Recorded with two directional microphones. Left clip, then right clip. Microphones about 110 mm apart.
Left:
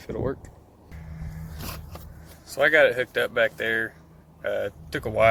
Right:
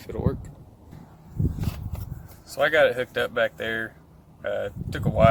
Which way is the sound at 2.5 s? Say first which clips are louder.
Left 1 dB; centre (ahead or behind).